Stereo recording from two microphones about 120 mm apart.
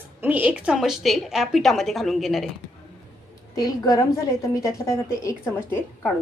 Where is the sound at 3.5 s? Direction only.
30° left (ahead or behind).